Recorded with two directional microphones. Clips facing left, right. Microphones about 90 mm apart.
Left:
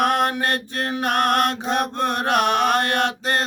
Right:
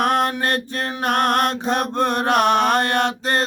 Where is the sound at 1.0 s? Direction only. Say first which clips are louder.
Right 1 dB; 30° right (ahead or behind).